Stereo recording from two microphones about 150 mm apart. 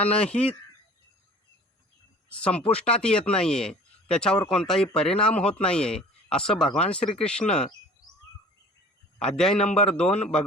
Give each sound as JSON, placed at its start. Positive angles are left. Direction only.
{"t": 0.0, "sound": "speech", "side_deg": 10}
{"t": 2.3, "sound": "speech", "side_deg": 10}
{"t": 9.1, "sound": "speech", "side_deg": 5}